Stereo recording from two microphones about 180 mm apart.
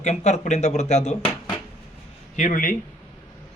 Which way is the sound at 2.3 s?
45° left (ahead or behind).